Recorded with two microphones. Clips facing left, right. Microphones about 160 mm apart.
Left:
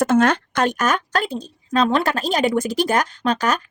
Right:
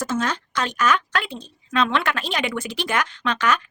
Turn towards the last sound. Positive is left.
turn(degrees=40)  # may be behind; listen again after turning